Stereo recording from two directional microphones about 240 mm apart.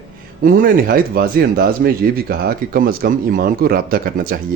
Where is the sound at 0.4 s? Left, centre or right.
Right.